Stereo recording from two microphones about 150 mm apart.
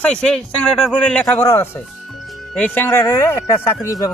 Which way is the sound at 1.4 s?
15° left (ahead or behind).